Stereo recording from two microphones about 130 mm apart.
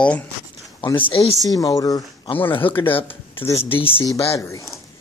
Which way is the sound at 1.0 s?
50° left (ahead or behind).